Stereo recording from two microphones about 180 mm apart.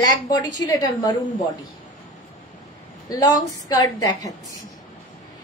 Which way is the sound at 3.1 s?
20° left (ahead or behind).